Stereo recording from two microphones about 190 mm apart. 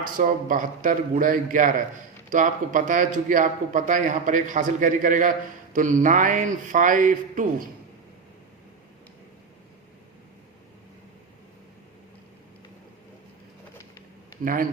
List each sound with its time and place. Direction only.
0.0 s a man's voice: 45° right (ahead or behind)
14.4 s a man's voice: 45° right (ahead or behind)